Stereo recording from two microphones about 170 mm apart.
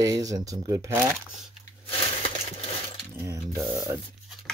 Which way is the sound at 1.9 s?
35° left (ahead or behind).